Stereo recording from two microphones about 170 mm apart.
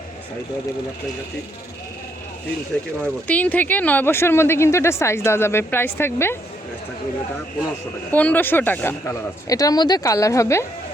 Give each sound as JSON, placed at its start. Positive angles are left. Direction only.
{"t": 3.0, "sound": "speech", "side_deg": 10}
{"t": 8.1, "sound": "speech", "side_deg": 10}